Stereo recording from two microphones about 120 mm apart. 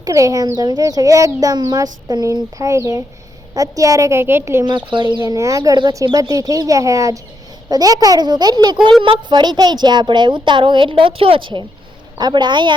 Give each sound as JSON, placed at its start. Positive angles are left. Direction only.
{"t": 0.0, "sound": "a woman's voice", "side_deg": -30}
{"t": 4.6, "sound": "speech", "side_deg": -40}
{"t": 5.2, "sound": "a woman's voice", "side_deg": -25}